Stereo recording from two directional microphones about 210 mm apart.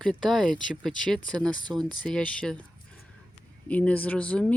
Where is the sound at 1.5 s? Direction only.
20° right (ahead or behind).